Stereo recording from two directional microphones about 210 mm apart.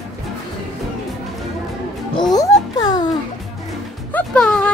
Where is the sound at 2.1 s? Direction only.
20° left (ahead or behind).